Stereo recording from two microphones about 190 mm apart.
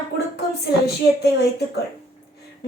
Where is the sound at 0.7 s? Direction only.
60° left (ahead or behind).